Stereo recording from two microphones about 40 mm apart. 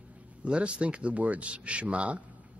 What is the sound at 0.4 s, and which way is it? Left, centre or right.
Speech, right.